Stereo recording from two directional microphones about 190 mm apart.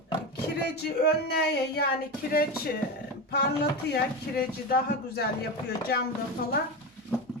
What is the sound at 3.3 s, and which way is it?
Speech, 60° left (ahead or behind).